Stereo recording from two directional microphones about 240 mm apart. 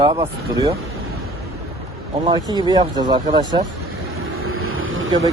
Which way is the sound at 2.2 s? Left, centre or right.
Centre.